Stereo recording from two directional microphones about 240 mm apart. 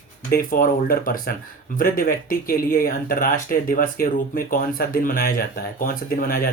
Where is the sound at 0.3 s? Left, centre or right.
Left.